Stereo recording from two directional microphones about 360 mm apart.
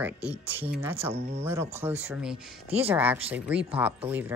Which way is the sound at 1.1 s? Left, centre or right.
Centre.